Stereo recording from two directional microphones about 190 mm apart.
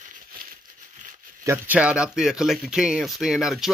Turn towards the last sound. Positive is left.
turn(degrees=0)  # may be behind; listen again after turning